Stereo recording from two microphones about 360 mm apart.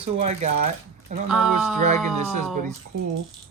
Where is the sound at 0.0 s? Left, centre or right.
Centre.